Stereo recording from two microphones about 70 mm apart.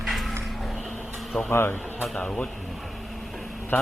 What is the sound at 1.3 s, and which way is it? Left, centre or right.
Speech, centre.